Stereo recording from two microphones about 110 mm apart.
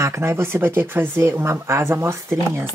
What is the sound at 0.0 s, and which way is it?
Speech, 25° right (ahead or behind).